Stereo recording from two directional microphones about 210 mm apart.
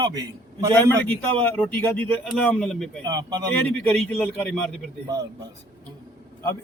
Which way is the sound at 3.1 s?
20° right (ahead or behind).